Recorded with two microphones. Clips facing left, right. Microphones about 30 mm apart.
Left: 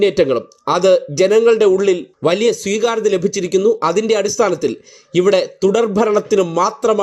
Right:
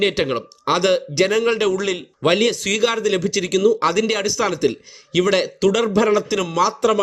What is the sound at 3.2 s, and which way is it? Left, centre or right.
Speech, right.